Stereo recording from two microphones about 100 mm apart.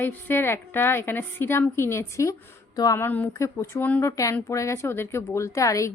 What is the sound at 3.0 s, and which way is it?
Speech, 15° left (ahead or behind).